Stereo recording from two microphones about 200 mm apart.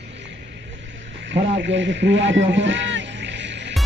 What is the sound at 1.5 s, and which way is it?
Radio, 65° right (ahead or behind).